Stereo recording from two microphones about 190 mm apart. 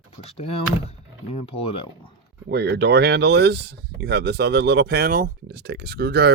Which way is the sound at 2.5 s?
60° right (ahead or behind).